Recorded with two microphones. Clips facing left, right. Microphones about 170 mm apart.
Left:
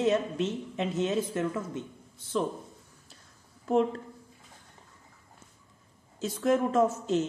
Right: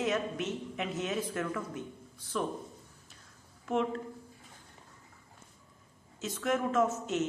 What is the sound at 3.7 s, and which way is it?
Speech, 35° left (ahead or behind).